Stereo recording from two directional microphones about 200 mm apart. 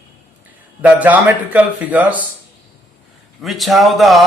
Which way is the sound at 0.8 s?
10° right (ahead or behind).